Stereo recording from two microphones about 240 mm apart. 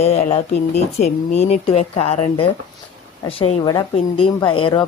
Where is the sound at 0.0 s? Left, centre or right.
Left.